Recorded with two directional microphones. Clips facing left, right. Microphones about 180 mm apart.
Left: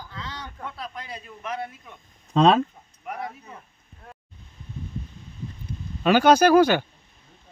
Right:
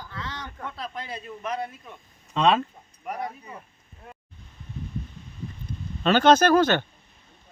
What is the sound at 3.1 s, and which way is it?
Speech, centre (ahead or behind).